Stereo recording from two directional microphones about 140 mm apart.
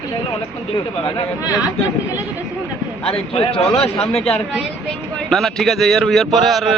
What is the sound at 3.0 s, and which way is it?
Speech, 45° left (ahead or behind).